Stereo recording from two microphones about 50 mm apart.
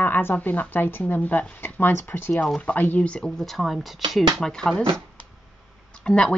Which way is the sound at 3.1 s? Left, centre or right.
Centre.